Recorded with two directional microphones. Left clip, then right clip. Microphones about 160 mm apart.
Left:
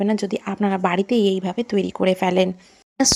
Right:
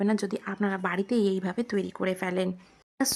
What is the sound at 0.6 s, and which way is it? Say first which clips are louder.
Speech: left 9 dB; 30° left (ahead or behind).